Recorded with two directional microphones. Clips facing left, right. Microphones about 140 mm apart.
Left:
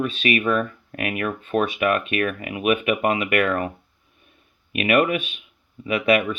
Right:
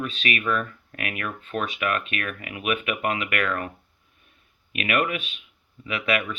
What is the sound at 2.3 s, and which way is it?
Speech, 20° left (ahead or behind).